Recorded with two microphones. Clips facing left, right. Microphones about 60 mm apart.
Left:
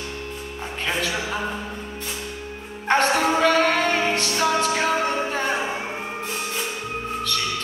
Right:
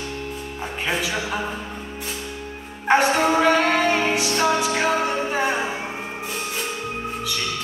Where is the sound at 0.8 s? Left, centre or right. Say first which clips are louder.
Even; centre.